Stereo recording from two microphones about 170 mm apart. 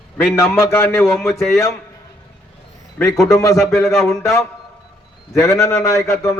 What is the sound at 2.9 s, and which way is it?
Speech, 15° left (ahead or behind).